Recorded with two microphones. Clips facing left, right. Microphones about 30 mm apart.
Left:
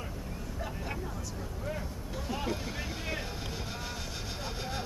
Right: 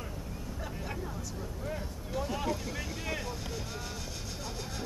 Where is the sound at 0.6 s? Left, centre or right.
Centre.